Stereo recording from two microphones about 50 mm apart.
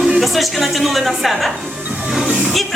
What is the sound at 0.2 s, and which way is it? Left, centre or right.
A woman's voice, centre.